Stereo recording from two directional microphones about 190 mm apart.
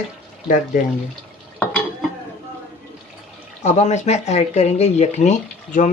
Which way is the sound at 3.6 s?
35° left (ahead or behind).